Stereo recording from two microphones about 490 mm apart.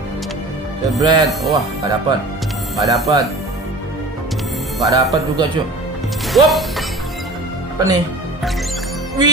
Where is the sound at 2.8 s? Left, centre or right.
Centre.